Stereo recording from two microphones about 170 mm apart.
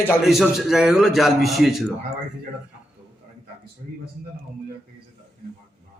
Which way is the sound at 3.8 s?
50° right (ahead or behind).